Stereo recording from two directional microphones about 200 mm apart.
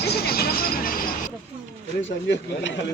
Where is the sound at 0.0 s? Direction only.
50° left (ahead or behind).